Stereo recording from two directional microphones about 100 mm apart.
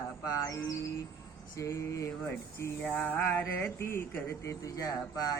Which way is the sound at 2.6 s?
15° left (ahead or behind).